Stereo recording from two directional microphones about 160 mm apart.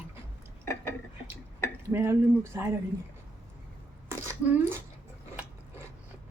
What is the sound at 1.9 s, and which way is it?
Speech, 15° right (ahead or behind).